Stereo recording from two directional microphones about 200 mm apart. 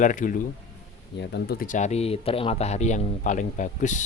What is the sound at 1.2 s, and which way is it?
Speech, 55° left (ahead or behind).